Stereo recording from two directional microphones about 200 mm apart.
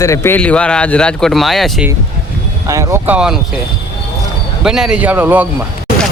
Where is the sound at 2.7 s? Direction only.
15° right (ahead or behind).